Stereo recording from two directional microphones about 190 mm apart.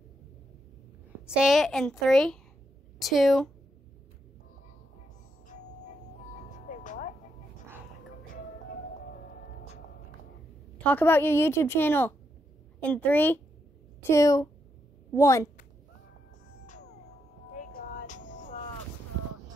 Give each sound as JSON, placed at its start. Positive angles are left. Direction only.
{"t": 1.2, "sound": "a child's voice", "side_deg": -5}
{"t": 6.3, "sound": "music", "side_deg": 40}
{"t": 9.0, "sound": "music", "side_deg": 60}
{"t": 10.8, "sound": "a woman's voice", "side_deg": 10}
{"t": 17.6, "sound": "music", "side_deg": 45}